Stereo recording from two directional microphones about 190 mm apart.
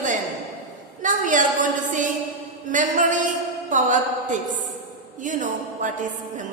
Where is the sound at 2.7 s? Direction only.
40° right (ahead or behind).